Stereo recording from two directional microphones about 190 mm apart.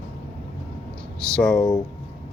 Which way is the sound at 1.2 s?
5° left (ahead or behind).